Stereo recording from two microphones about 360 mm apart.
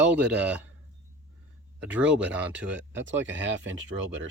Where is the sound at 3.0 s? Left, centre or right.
Right.